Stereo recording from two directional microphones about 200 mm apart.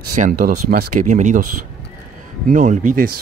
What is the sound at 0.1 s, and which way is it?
Speech, 40° right (ahead or behind).